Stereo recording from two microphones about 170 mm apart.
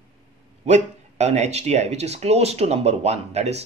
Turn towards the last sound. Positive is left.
turn(degrees=-40)  # may be behind; listen again after turning